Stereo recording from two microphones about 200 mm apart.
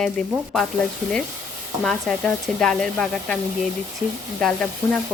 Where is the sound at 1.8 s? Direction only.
Centre (ahead or behind).